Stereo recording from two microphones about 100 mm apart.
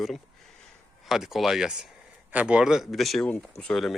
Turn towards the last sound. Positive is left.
turn(degrees=5)  # may be behind; listen again after turning